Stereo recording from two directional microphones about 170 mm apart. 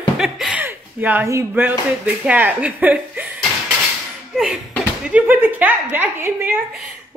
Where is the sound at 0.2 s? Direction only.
5° right (ahead or behind).